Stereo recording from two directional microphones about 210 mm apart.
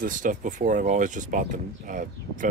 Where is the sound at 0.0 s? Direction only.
40° right (ahead or behind).